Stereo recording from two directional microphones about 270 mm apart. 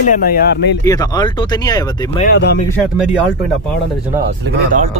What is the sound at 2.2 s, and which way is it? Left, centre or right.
Speech, left.